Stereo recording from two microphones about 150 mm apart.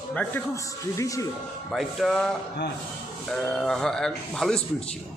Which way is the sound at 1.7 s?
Centre (ahead or behind).